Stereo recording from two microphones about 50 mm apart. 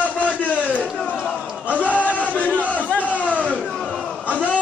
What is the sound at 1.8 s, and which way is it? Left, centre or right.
Battle cry, left.